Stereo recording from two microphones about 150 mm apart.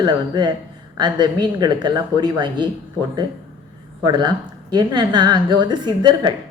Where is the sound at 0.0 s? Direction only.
30° right (ahead or behind).